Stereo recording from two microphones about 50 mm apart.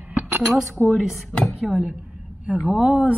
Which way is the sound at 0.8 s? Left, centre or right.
Centre.